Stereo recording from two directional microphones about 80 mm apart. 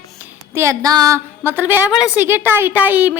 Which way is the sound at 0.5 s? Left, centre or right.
Right.